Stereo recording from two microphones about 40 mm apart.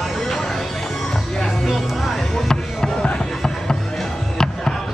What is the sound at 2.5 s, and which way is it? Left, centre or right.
Music, centre.